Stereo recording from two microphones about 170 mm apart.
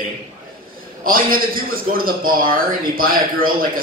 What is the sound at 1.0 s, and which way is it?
Speech, 55° right (ahead or behind).